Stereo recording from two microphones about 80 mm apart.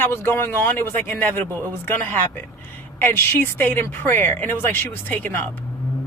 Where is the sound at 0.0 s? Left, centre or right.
Left.